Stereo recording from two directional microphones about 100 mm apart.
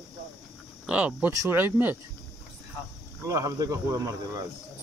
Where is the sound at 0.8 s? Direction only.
15° right (ahead or behind).